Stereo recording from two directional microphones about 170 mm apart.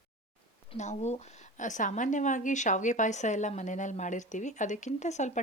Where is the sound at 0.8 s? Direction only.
40° left (ahead or behind).